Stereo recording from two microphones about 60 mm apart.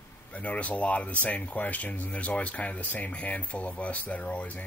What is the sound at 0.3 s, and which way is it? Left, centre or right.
Speech, left.